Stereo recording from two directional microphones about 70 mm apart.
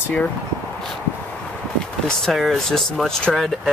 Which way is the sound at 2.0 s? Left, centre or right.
Centre.